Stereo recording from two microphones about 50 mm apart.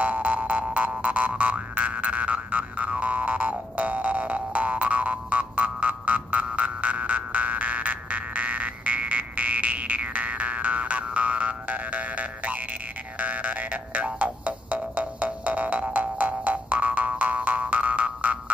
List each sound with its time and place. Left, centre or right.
0.0 s boing: right
13.2 s music: right